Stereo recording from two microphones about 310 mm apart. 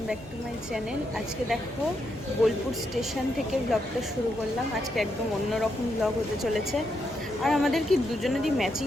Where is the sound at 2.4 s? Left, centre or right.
Centre.